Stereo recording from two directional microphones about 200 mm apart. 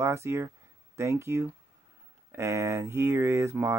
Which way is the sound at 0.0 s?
15° right (ahead or behind).